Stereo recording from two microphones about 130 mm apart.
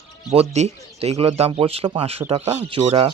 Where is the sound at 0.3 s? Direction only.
60° right (ahead or behind).